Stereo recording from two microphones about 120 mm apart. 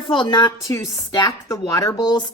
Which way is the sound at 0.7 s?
30° left (ahead or behind).